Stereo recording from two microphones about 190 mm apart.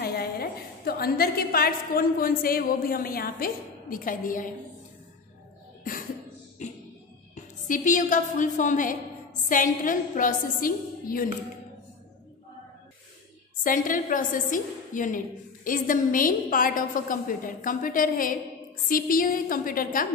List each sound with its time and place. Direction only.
0.0 s a woman's voice: 55° left (ahead or behind)
6.6 s music: 40° left (ahead or behind)
7.6 s a woman's voice: 45° left (ahead or behind)
13.7 s a woman's voice: 45° left (ahead or behind)